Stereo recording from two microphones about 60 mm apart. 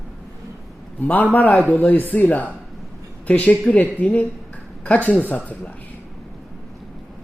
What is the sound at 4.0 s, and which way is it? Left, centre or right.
Speech, left.